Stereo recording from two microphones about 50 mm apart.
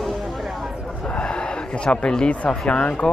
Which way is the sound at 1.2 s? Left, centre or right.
Left.